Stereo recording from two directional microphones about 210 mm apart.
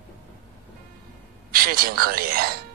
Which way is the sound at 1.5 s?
45° right (ahead or behind).